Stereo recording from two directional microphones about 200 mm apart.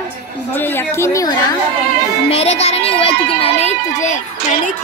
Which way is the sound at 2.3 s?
30° left (ahead or behind).